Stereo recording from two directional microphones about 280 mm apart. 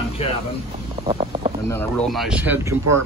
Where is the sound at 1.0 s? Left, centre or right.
Centre.